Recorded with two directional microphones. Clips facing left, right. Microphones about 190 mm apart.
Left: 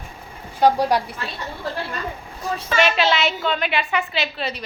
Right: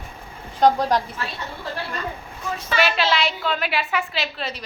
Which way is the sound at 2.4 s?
35° left (ahead or behind).